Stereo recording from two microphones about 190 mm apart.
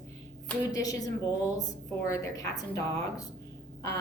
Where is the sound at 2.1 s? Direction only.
15° left (ahead or behind).